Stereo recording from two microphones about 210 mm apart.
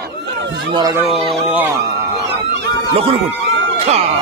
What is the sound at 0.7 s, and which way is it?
Speech, 15° right (ahead or behind).